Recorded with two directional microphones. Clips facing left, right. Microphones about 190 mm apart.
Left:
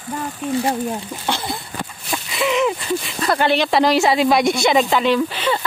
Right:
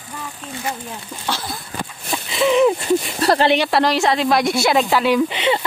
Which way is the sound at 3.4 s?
15° right (ahead or behind).